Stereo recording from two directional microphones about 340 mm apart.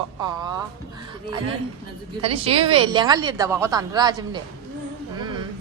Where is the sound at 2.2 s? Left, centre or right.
Centre.